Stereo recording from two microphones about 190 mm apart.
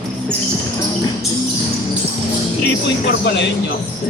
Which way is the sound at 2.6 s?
60° left (ahead or behind).